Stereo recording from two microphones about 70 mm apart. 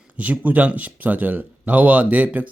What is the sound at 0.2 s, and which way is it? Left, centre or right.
Speech, right.